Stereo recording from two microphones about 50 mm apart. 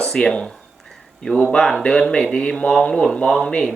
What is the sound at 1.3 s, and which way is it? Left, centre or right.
Speech, centre.